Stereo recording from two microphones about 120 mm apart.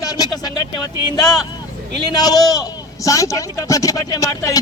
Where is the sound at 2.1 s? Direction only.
35° left (ahead or behind).